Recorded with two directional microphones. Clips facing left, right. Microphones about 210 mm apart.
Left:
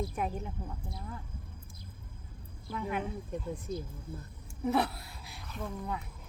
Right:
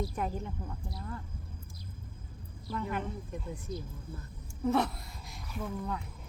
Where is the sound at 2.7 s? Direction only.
10° left (ahead or behind).